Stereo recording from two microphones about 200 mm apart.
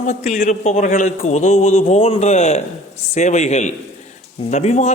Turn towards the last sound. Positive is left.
turn(degrees=35)  # may be behind; listen again after turning